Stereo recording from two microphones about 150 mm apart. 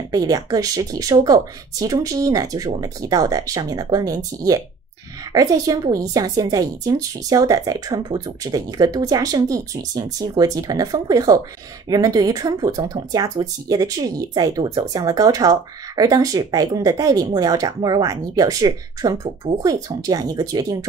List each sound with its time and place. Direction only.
0.1 s speech: 25° right (ahead or behind)